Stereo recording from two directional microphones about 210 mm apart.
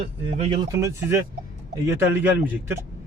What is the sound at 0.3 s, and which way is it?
Speech, 25° right (ahead or behind).